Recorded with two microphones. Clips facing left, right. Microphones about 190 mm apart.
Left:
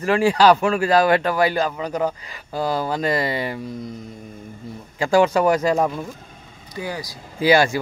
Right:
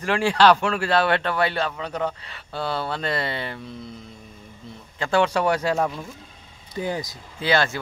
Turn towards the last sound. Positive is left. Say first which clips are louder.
# left 6 dB
turn(degrees=10)  # may be behind; listen again after turning